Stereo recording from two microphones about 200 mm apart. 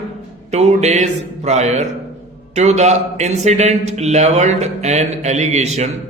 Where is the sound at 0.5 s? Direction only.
35° right (ahead or behind).